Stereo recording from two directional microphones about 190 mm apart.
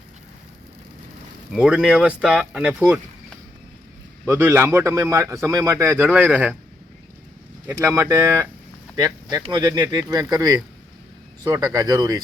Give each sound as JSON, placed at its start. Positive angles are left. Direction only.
{"t": 1.5, "sound": "speech", "side_deg": -5}
{"t": 4.3, "sound": "a man's voice", "side_deg": -10}
{"t": 7.7, "sound": "a man's voice", "side_deg": -15}